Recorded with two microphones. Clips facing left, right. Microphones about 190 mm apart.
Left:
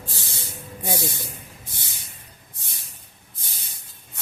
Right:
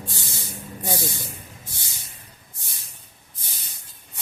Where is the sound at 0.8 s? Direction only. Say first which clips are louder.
Left 1 dB; 15° left (ahead or behind).